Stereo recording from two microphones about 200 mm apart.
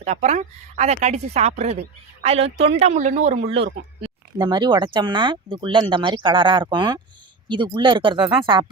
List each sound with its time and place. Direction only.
0.0 s a woman's voice: 35° right (ahead or behind)
4.0 s speech: 20° right (ahead or behind)